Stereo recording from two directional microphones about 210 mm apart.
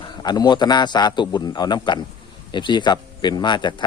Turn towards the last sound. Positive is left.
turn(degrees=20)  # may be behind; listen again after turning